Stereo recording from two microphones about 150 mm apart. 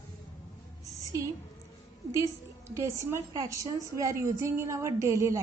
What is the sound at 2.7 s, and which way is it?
A woman's voice, 20° right (ahead or behind).